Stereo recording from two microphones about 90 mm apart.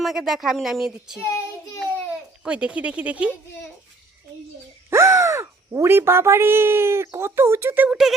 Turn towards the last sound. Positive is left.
turn(degrees=-20)  # may be behind; listen again after turning